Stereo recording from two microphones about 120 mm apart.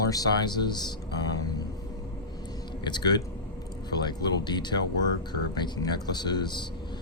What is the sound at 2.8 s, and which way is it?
Speech, 35° left (ahead or behind).